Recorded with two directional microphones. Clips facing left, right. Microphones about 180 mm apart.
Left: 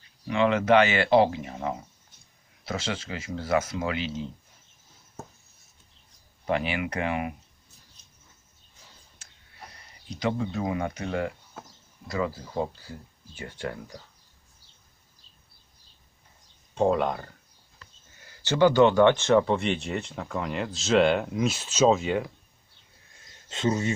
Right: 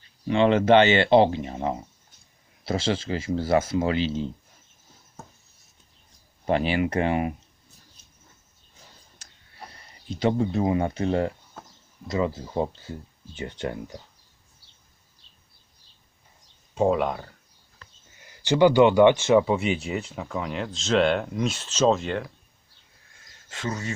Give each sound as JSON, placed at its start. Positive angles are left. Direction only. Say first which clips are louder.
{"t": 0.3, "sound": "speech", "louder": "right 3 dB", "side_deg": -30}
{"t": 6.5, "sound": "speech", "louder": "right 5 dB", "side_deg": -30}
{"t": 9.1, "sound": "a sound", "louder": "right 4 dB", "side_deg": -30}
{"t": 11.6, "sound": "a sound", "louder": "even", "side_deg": 5}
{"t": 12.0, "sound": "speech", "louder": "right 4 dB", "side_deg": -20}
{"t": 16.7, "sound": "speech", "louder": "right 1 dB", "side_deg": -5}
{"t": 18.3, "sound": "speech", "louder": "right 2 dB", "side_deg": -15}
{"t": 23.5, "sound": "speech", "louder": "left 6 dB", "side_deg": 20}